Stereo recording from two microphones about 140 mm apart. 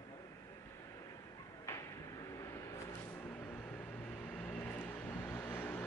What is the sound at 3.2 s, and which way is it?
Vehicle, 10° left (ahead or behind).